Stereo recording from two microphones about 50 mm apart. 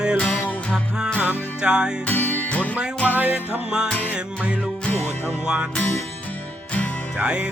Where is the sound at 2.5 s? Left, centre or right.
Left.